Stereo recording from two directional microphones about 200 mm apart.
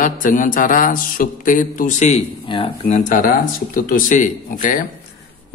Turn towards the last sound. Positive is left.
turn(degrees=40)  # may be behind; listen again after turning